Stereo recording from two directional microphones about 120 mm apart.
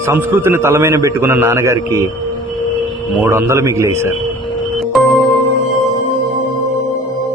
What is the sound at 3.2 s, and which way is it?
Speech, 20° right (ahead or behind).